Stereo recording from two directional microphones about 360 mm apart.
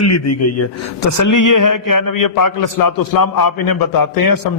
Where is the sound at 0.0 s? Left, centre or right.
Left.